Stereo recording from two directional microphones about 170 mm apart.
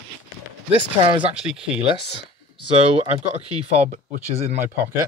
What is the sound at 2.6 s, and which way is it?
Speech, 30° right (ahead or behind).